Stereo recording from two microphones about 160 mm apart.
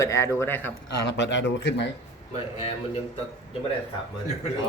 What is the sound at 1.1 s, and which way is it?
Speech, 90° left.